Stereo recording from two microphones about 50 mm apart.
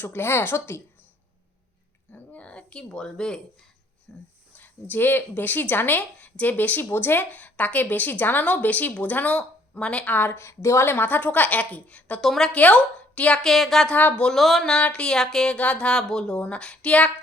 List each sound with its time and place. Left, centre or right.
0.0 s speech: left
2.3 s a woman's voice: left
4.5 s speech: left
6.0 s speech: left
10.1 s speech: left
10.8 s speech: left
12.2 s speech: centre
12.5 s a woman's voice: left
13.4 s speech: centre
13.9 s a woman's voice: left
14.3 s speech: centre
14.8 s a woman's voice: left
15.5 s a woman's voice: left
16.0 s a woman's voice: centre